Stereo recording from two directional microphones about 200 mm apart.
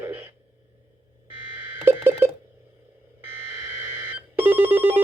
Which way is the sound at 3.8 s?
10° right (ahead or behind).